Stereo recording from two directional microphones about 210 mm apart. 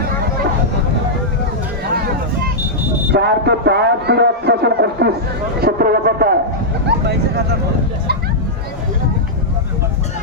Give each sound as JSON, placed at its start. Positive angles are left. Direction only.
{"t": 3.1, "sound": "a man's voice", "side_deg": -50}